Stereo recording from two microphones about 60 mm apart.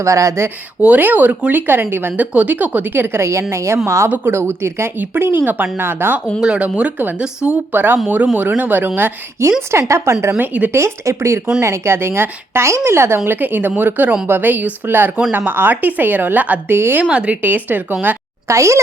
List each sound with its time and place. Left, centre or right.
0.0 s speech: right
0.8 s speech: right
2.3 s a woman's voice: right
6.4 s speech: centre
7.7 s speech: right
9.4 s a woman's voice: right
10.4 s speech: right
10.7 s a woman's voice: right
16.7 s speech: right
17.0 s speech: right
17.4 s speech: right
18.4 s speech: right